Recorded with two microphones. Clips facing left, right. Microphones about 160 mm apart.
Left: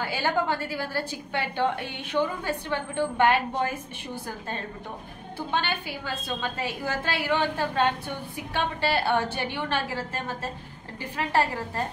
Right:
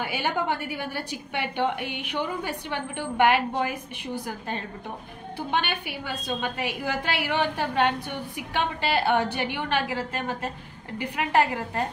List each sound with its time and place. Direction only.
0.3 s a woman's voice: 15° right (ahead or behind)